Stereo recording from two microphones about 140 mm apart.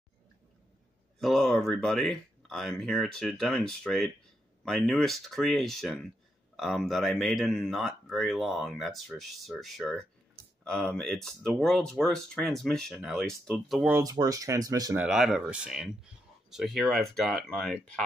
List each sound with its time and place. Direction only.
1.2 s speech: centre (ahead or behind)
13.8 s speech: 15° right (ahead or behind)
15.0 s speech: 5° right (ahead or behind)